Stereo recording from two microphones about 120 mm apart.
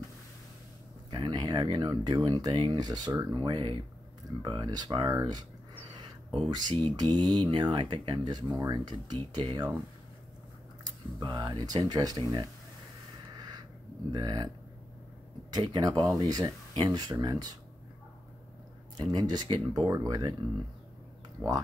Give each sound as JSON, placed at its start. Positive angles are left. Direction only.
{"t": 1.1, "sound": "speech", "side_deg": -40}
{"t": 10.8, "sound": "speech", "side_deg": -40}
{"t": 14.1, "sound": "speech", "side_deg": -35}
{"t": 15.5, "sound": "speech", "side_deg": -35}
{"t": 18.9, "sound": "speech", "side_deg": -35}